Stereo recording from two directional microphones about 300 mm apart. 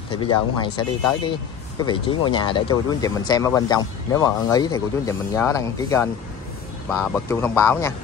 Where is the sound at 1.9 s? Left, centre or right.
Centre.